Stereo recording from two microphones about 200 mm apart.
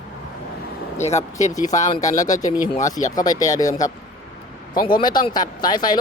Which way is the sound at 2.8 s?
15° left (ahead or behind).